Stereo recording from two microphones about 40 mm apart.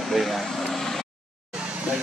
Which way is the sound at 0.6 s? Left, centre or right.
Centre.